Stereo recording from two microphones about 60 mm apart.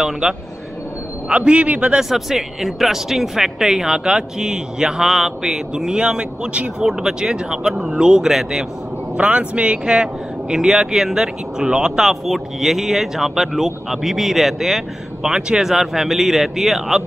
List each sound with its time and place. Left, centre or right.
0.0 s speech: centre
1.3 s speech: centre
2.0 s speech: centre
9.1 s speech: centre